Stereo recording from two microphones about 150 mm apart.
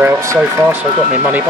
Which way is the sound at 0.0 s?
15° right (ahead or behind).